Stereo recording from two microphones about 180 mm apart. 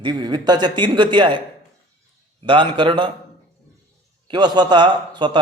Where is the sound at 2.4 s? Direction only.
25° right (ahead or behind).